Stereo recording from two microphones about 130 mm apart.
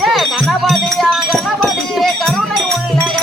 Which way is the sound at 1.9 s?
5° left (ahead or behind).